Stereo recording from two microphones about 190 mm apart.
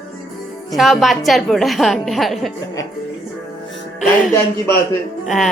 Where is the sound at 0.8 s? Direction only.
Centre (ahead or behind).